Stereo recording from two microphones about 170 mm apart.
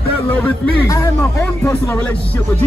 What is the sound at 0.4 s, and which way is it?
Speech, 15° left (ahead or behind).